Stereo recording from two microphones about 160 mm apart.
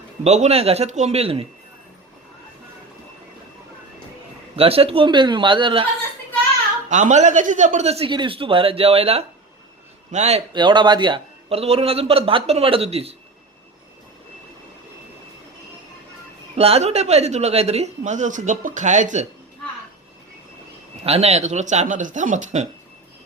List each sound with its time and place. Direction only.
0.3 s a man's voice: 45° right (ahead or behind)
4.5 s a man's voice: 35° right (ahead or behind)
6.9 s a man's voice: 50° right (ahead or behind)
10.5 s a man's voice: 30° right (ahead or behind)
16.6 s a man's voice: 40° right (ahead or behind)
21.0 s a man's voice: 40° right (ahead or behind)